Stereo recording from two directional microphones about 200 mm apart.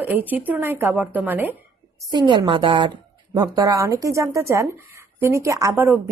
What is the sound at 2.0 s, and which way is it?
A woman's voice, 20° right (ahead or behind).